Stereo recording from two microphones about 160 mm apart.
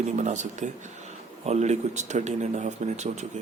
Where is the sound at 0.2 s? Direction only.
50° right (ahead or behind).